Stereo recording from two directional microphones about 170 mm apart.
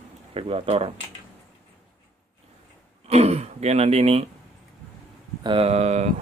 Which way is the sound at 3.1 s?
40° right (ahead or behind).